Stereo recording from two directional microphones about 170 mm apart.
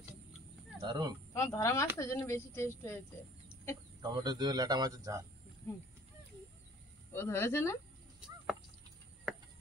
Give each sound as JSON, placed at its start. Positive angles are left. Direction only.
{"t": 0.7, "sound": "speech", "side_deg": -25}
{"t": 1.3, "sound": "speech", "side_deg": 15}
{"t": 4.0, "sound": "a man's voice", "side_deg": -25}
{"t": 7.1, "sound": "speech", "side_deg": 15}